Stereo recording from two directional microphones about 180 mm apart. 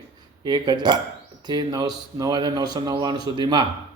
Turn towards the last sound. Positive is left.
turn(degrees=-25)  # may be behind; listen again after turning